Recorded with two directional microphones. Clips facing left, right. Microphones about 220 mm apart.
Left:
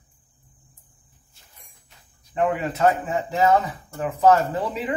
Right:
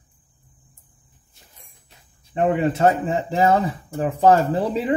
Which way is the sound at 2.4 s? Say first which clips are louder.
Right 3 dB; 25° right (ahead or behind).